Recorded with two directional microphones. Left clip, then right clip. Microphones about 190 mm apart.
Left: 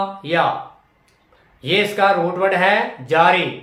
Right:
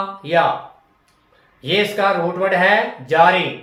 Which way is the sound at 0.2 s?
25° left (ahead or behind).